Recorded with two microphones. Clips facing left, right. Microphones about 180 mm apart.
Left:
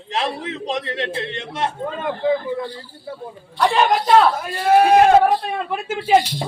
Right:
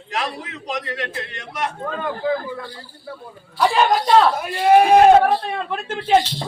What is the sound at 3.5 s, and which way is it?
Music, centre (ahead or behind).